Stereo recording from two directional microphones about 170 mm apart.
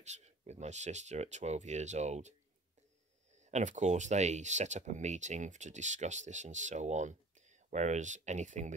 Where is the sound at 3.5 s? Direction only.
45° right (ahead or behind).